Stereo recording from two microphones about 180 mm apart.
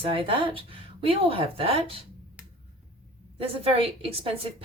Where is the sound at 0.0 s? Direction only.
30° right (ahead or behind).